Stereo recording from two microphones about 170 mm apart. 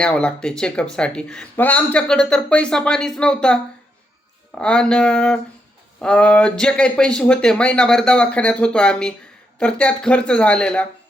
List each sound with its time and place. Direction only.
0.0 s speech: 5° left (ahead or behind)